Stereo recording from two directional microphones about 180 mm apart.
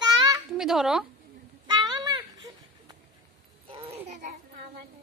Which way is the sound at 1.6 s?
25° right (ahead or behind).